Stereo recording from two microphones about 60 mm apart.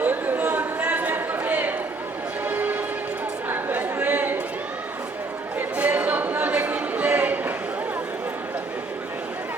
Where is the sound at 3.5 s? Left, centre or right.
Right.